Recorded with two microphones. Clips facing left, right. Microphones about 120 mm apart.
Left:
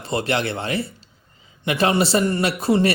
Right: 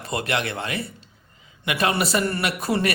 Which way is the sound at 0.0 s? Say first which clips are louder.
Left 3 dB; 30° left (ahead or behind).